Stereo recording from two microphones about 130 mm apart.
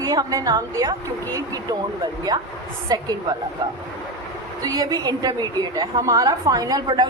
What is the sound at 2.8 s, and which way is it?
Speech, 30° right (ahead or behind).